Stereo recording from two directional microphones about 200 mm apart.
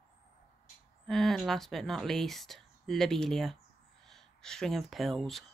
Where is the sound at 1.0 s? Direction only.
Centre (ahead or behind).